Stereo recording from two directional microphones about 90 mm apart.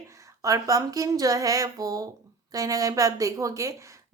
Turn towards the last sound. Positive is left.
turn(degrees=-35)  # may be behind; listen again after turning